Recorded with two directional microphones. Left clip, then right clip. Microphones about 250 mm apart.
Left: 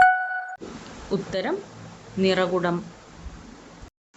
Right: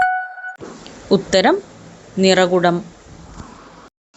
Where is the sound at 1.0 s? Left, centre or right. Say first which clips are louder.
Right 13 dB; right.